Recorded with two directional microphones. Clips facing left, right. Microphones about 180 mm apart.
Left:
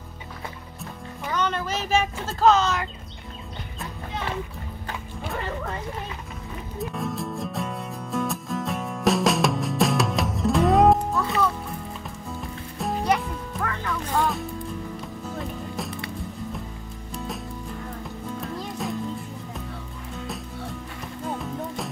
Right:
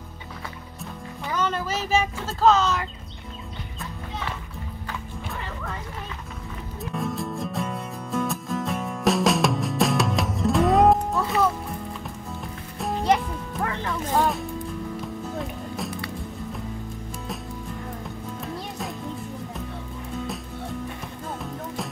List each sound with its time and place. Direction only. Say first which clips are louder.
1.3 s speech: even; 5° right (ahead or behind)
6.8 s music: even; centre (ahead or behind)
12.4 s music: left 1 dB; centre (ahead or behind)
13.6 s music: right 2 dB; 25° right (ahead or behind)